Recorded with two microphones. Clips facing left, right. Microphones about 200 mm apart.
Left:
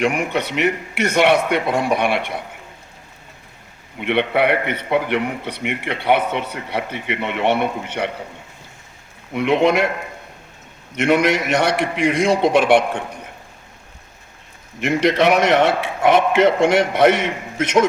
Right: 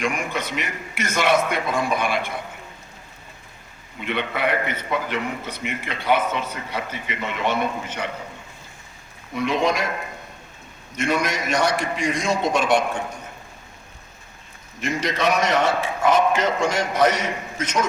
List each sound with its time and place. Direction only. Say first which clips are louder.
0.0 s a man's voice: left 6 dB; 65° left (ahead or behind)
4.0 s a man's voice: left 7 dB; 65° left (ahead or behind)
9.3 s a man's voice: left 6 dB; 60° left (ahead or behind)
10.9 s a man's voice: left 7 dB; 65° left (ahead or behind)
14.8 s a man's voice: left 8 dB; 65° left (ahead or behind)